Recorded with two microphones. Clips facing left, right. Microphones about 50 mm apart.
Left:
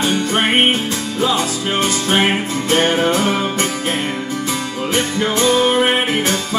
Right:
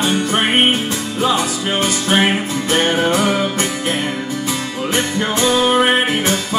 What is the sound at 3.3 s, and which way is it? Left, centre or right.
Music, left.